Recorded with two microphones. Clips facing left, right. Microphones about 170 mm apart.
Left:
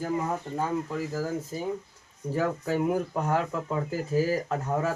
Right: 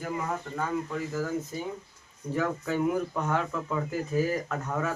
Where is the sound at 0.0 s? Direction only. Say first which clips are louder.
Left 3 dB; 30° left (ahead or behind).